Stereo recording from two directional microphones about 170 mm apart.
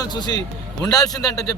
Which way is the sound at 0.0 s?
25° left (ahead or behind).